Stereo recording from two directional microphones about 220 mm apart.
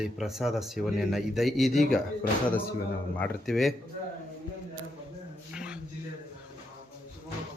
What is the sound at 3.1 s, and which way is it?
Speech, 5° left (ahead or behind).